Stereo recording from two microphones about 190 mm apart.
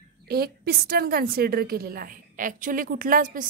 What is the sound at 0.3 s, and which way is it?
A woman's voice, 55° right (ahead or behind).